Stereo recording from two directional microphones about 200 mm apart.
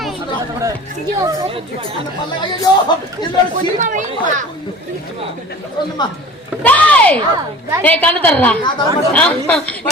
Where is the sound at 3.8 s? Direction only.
40° right (ahead or behind).